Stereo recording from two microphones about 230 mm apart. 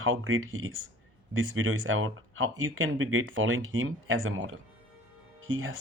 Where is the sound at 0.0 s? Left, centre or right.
Right.